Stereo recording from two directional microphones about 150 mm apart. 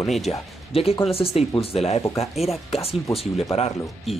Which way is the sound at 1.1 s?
40° left (ahead or behind).